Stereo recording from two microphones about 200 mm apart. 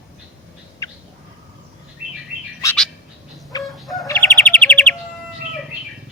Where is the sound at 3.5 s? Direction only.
20° left (ahead or behind).